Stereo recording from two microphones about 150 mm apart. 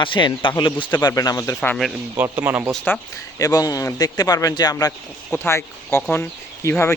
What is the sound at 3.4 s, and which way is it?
Speech, 25° left (ahead or behind).